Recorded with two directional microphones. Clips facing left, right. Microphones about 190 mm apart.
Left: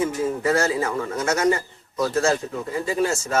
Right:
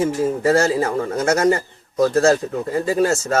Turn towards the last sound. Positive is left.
turn(degrees=-40)  # may be behind; listen again after turning